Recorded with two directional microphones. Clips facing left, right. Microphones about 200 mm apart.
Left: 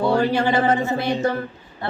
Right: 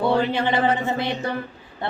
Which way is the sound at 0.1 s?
45° left (ahead or behind).